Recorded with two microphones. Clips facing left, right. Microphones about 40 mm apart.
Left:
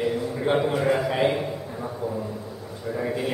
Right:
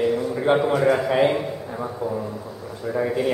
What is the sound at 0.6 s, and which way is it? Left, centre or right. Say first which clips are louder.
Speech: right 3 dB; centre.